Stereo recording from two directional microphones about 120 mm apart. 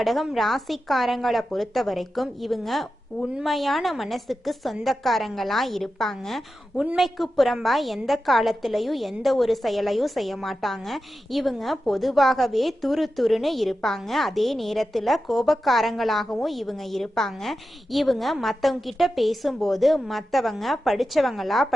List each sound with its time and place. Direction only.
0.0 s a woman's voice: centre (ahead or behind)